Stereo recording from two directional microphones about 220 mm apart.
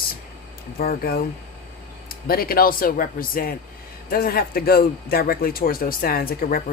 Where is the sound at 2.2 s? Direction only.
40° left (ahead or behind).